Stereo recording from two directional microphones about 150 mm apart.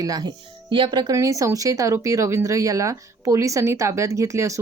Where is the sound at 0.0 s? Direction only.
25° right (ahead or behind).